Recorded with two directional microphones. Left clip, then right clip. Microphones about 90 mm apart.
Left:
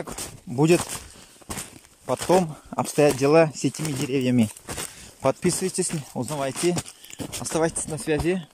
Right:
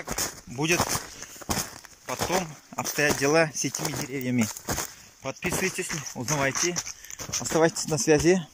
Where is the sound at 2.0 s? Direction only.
90° left.